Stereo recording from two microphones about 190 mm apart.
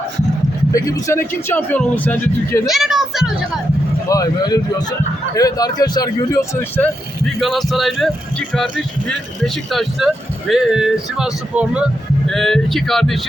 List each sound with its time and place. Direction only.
0.7 s speech: 20° left (ahead or behind)
2.6 s a sound: centre (ahead or behind)
4.1 s a man's voice: 20° left (ahead or behind)
7.3 s speech: centre (ahead or behind)